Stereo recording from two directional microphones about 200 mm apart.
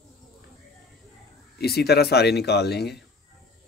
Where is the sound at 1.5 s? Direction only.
55° left (ahead or behind).